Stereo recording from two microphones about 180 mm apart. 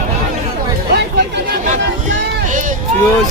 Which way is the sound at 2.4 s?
45° right (ahead or behind).